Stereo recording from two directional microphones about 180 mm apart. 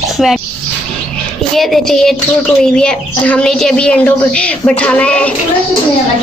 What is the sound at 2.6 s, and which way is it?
Speech, 5° left (ahead or behind).